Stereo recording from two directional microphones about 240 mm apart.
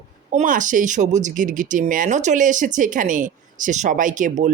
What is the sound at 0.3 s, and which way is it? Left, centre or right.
Speech, right.